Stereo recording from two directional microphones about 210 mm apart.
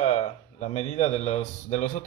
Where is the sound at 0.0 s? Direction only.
30° left (ahead or behind).